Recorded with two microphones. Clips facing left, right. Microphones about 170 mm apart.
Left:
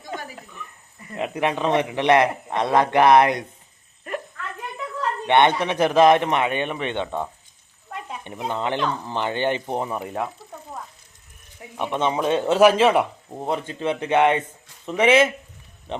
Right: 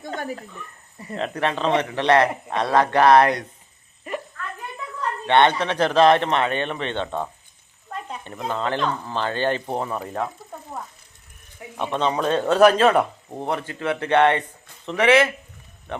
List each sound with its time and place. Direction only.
1.1 s speech: 15° left (ahead or behind)
4.1 s a sound: centre (ahead or behind)
5.2 s speech: 15° left (ahead or behind)
11.8 s speech: 15° left (ahead or behind)